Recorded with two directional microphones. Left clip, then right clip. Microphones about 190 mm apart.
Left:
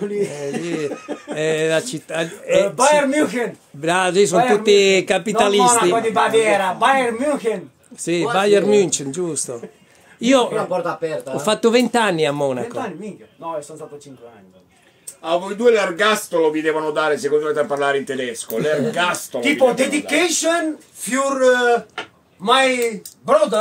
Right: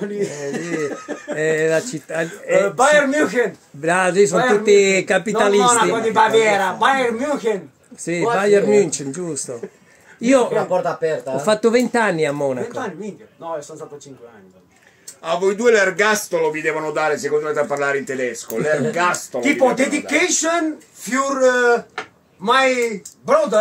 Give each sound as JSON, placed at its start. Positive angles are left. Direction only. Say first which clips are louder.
{"t": 0.0, "sound": "a man's voice", "louder": "left 1 dB", "side_deg": 0}
{"t": 10.7, "sound": "speech", "louder": "right 2 dB", "side_deg": -45}
{"t": 11.3, "sound": "a man's voice", "louder": "left 1 dB", "side_deg": 5}
{"t": 15.2, "sound": "speech", "louder": "even", "side_deg": -50}
{"t": 16.6, "sound": "a man's voice", "louder": "left 1 dB", "side_deg": -15}
{"t": 19.9, "sound": "speech", "louder": "even", "side_deg": 40}
{"t": 21.1, "sound": "a man's voice", "louder": "left 1 dB", "side_deg": 5}